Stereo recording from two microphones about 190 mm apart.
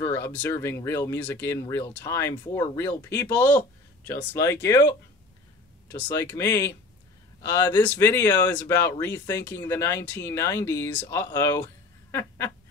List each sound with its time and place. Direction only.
0.0 s speech: 10° left (ahead or behind)